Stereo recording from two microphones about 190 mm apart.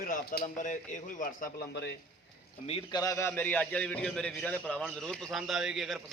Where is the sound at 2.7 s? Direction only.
25° left (ahead or behind); by 6.0 s centre (ahead or behind).